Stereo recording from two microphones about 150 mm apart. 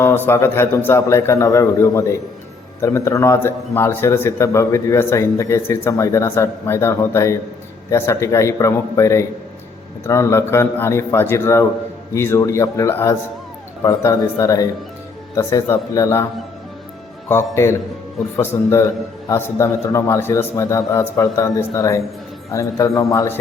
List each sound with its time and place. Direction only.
0.0 s a man's voice: 15° left (ahead or behind)
17.2 s a man's voice: 15° left (ahead or behind)